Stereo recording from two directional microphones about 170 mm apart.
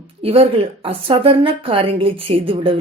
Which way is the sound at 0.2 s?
35° right (ahead or behind).